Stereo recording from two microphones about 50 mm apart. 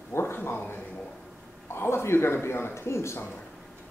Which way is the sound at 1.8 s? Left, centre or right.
Left.